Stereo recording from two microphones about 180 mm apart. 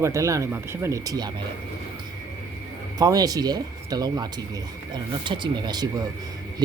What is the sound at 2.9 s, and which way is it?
Speech, 20° right (ahead or behind).